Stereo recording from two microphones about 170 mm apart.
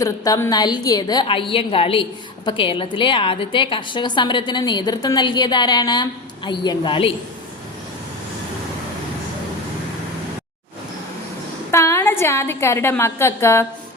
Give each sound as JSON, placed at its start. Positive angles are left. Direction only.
{"t": 0.0, "sound": "a woman's voice", "side_deg": 15}
{"t": 11.7, "sound": "a woman's voice", "side_deg": 15}